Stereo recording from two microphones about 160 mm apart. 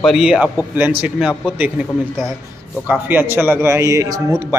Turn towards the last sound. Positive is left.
turn(degrees=-20)  # may be behind; listen again after turning